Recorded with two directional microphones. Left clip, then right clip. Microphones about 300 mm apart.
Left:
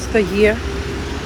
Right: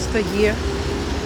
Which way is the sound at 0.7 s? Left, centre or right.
Right.